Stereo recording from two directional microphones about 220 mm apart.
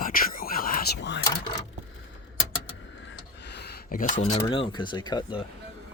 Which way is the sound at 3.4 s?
50° left (ahead or behind).